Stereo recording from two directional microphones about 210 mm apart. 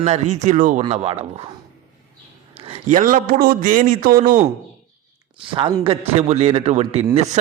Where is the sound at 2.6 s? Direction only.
30° right (ahead or behind).